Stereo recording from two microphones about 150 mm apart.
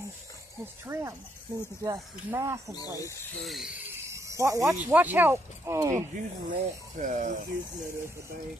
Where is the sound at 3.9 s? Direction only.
20° right (ahead or behind).